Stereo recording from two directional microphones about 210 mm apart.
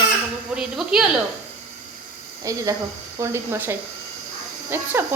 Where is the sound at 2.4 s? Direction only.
15° right (ahead or behind).